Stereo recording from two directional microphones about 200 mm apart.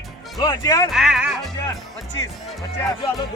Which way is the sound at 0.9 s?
Centre (ahead or behind).